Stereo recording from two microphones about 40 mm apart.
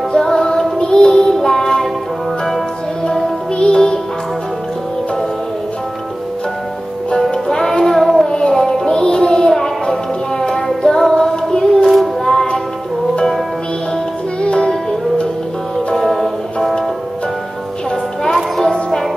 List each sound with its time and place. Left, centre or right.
0.1 s music: centre
1.1 s child singing: centre
3.5 s music: left
7.4 s music: centre
7.8 s child singing: centre
8.3 s child singing: centre
10.4 s music: centre
14.4 s music: left